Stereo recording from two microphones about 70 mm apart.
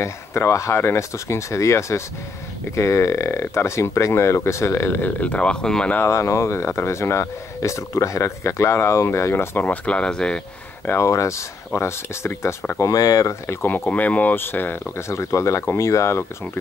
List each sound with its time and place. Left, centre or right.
0.0 s speech: left; by 5.9 s centre
5.9 s speech: left
9.7 s speech: centre
10.9 s speech: left
12.8 s speech: left
13.8 s speech: left